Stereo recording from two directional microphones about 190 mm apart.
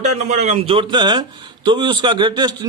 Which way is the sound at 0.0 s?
40° right (ahead or behind).